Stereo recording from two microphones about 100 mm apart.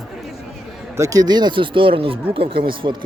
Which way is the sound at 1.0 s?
40° right (ahead or behind).